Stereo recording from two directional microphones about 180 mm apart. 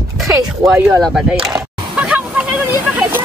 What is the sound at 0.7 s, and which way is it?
Speech, 15° right (ahead or behind).